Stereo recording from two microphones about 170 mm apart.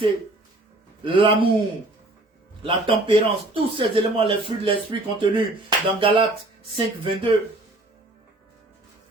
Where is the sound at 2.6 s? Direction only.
35° right (ahead or behind).